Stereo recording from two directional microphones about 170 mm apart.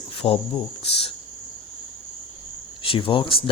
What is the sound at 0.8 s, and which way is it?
Speech, 35° left (ahead or behind).